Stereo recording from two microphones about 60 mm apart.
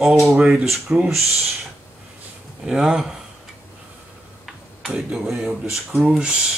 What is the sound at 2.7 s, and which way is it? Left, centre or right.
Speech, centre.